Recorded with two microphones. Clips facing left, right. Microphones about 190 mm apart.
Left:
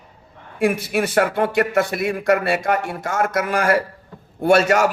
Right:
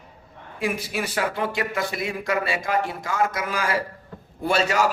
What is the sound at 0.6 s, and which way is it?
A man's voice, 60° left (ahead or behind).